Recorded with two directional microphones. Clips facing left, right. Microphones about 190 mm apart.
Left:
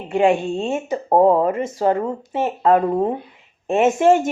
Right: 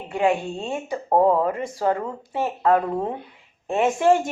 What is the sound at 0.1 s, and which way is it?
A woman's voice, 25° left (ahead or behind).